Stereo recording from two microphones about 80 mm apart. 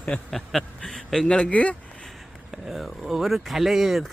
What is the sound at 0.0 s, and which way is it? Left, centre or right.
Speech, centre.